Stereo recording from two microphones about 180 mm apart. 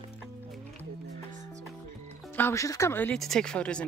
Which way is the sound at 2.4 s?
15° left (ahead or behind).